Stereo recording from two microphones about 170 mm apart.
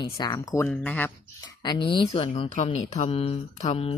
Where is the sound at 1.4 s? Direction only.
25° left (ahead or behind).